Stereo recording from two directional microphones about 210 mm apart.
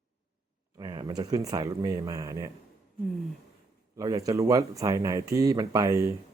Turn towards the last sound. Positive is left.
turn(degrees=-15)  # may be behind; listen again after turning